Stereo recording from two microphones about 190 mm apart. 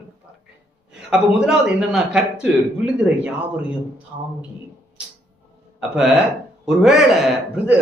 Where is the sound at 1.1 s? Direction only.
5° right (ahead or behind).